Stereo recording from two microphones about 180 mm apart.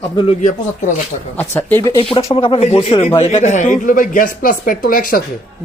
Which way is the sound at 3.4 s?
40° left (ahead or behind).